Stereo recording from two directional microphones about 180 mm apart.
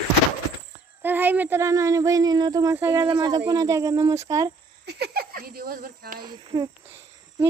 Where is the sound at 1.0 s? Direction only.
10° right (ahead or behind).